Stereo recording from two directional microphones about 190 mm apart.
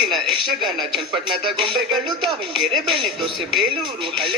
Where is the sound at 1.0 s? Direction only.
25° right (ahead or behind).